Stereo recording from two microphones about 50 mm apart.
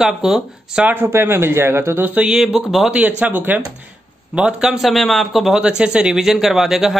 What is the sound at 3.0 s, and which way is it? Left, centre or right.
Speech, right.